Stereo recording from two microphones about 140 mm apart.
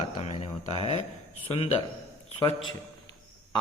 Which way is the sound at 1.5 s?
40° left (ahead or behind).